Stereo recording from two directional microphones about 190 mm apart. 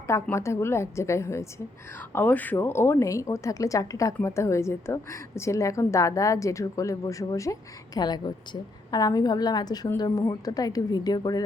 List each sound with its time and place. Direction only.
0.1 s a woman's voice: 15° left (ahead or behind)